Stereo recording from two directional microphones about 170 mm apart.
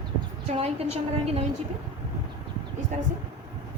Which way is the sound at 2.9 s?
45° right (ahead or behind).